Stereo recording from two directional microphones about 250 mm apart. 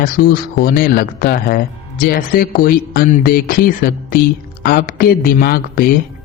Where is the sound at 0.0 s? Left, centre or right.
Left.